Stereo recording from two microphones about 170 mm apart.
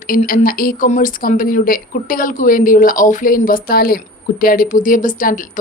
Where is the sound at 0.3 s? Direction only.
60° left (ahead or behind).